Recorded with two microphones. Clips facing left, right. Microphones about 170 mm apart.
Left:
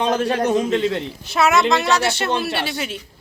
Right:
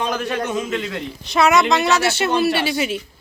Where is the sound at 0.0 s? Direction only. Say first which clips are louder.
Left 4 dB; 30° left (ahead or behind).